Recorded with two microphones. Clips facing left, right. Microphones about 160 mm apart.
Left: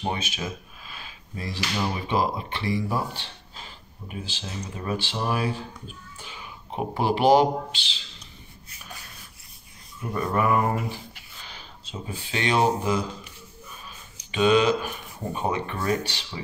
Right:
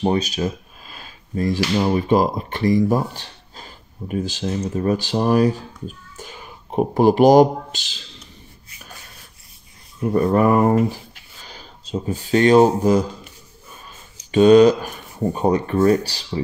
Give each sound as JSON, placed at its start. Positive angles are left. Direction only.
{"t": 0.0, "sound": "speech", "side_deg": -40}
{"t": 10.1, "sound": "speech", "side_deg": -40}
{"t": 14.3, "sound": "speech", "side_deg": -40}